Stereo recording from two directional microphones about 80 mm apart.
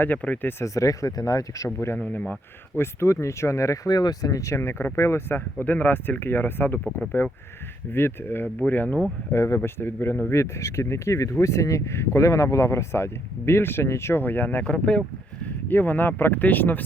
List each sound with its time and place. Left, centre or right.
0.0 s speech: centre
0.6 s speech: left
2.0 s speech: centre
2.8 s speech: left
3.8 s speech: left
9.3 s speech: left
14.6 s speech: centre
15.7 s speech: left